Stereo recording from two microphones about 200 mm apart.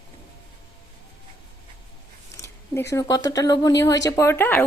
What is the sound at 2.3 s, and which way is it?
Zipper, 15° left (ahead or behind).